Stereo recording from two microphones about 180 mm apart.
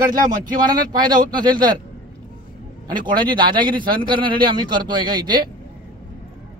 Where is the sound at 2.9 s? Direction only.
25° right (ahead or behind).